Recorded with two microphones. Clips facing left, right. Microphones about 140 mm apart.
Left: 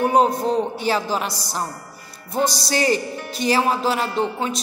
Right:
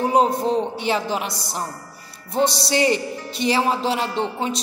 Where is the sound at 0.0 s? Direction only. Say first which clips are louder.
Left 1 dB; 25° right (ahead or behind).